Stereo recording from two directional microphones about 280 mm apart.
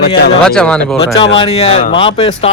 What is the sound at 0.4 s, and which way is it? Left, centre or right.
Speech, centre.